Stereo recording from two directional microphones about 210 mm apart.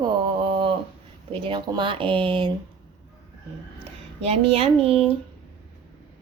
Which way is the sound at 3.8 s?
30° right (ahead or behind).